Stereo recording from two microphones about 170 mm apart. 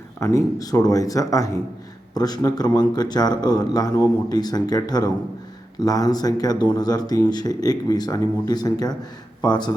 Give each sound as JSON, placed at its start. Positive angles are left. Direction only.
{"t": 0.2, "sound": "speech", "side_deg": 20}